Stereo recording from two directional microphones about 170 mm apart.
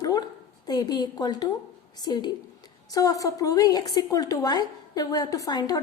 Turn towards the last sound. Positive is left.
turn(degrees=20)  # may be behind; listen again after turning